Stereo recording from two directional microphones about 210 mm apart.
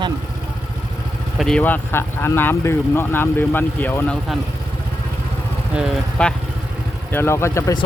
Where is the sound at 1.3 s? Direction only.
5° left (ahead or behind).